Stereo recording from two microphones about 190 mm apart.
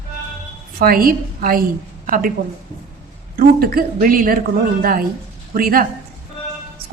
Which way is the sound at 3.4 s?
50° right (ahead or behind).